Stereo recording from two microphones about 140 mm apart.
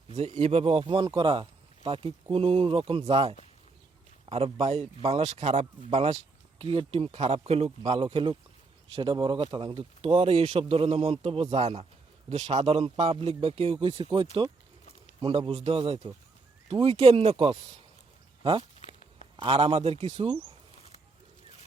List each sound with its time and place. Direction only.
0.1 s a man's voice: 50° right (ahead or behind)
18.8 s a sound: 55° left (ahead or behind)
19.4 s a man's voice: 40° right (ahead or behind)